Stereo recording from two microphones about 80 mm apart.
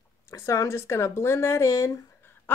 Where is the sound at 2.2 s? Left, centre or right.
Left.